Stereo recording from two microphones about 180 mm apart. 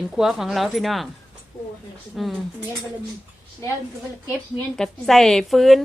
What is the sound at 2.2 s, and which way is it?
Speech, centre (ahead or behind).